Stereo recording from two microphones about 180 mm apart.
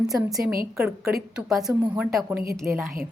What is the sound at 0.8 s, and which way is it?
A woman's voice, centre (ahead or behind).